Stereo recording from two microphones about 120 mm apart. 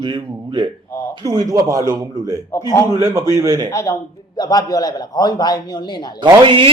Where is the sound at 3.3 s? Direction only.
25° right (ahead or behind).